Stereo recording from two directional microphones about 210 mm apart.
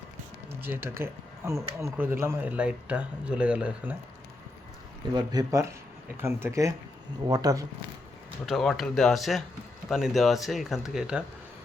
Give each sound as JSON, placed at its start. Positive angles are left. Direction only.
{"t": 0.6, "sound": "speech", "side_deg": -10}
{"t": 5.1, "sound": "speech", "side_deg": -20}
{"t": 8.4, "sound": "speech", "side_deg": 0}